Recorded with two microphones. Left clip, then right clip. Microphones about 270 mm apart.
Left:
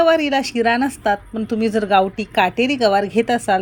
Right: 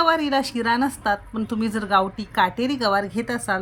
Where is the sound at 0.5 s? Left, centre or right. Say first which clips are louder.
Left 4 dB; right.